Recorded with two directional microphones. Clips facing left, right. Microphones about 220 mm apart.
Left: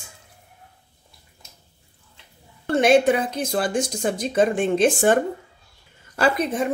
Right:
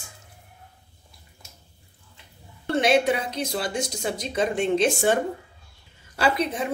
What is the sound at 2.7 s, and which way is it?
A woman's voice, 50° left (ahead or behind).